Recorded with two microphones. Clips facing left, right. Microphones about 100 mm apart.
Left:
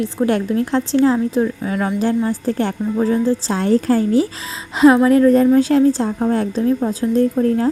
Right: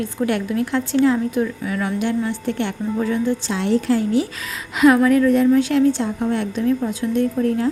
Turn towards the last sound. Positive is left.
turn(degrees=35)  # may be behind; listen again after turning